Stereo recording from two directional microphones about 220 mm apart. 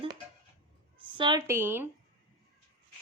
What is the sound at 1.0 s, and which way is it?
Speech, 20° right (ahead or behind).